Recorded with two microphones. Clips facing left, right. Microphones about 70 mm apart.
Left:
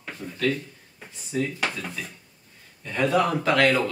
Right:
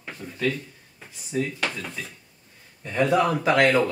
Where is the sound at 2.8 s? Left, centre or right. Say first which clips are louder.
Right 1 dB; centre.